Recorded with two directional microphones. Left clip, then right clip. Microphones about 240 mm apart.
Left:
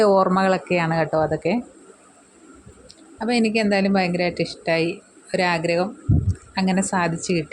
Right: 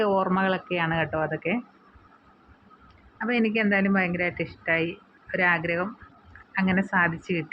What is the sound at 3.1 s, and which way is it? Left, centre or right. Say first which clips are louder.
Speech: left 4 dB; left.